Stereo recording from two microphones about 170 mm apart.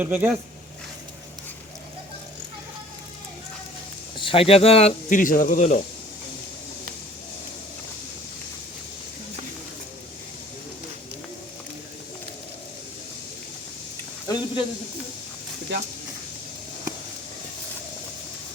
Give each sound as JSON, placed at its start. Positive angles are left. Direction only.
{"t": 0.0, "sound": "speech", "side_deg": -10}
{"t": 4.2, "sound": "speech", "side_deg": 30}
{"t": 14.3, "sound": "speech", "side_deg": 25}